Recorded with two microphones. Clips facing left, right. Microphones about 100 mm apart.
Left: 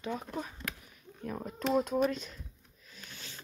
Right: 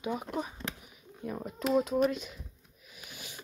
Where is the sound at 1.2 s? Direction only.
5° right (ahead or behind).